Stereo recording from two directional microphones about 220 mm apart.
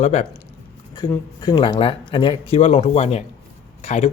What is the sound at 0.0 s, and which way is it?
Speech, 30° left (ahead or behind).